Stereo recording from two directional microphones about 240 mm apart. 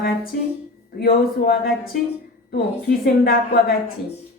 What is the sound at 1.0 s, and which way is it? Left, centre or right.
A woman's voice, left.